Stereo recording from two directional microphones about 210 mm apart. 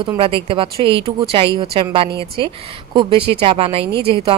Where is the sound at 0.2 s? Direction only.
25° right (ahead or behind).